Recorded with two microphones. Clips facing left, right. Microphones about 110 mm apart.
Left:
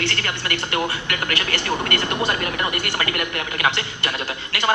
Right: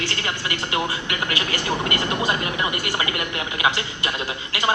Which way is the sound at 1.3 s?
15° right (ahead or behind).